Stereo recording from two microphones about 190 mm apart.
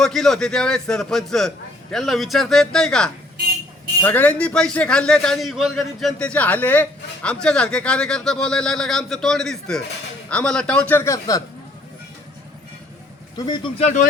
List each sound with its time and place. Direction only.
0.0 s a man's voice: centre (ahead or behind); by 11.4 s 15° left (ahead or behind)
13.3 s speech: 25° left (ahead or behind)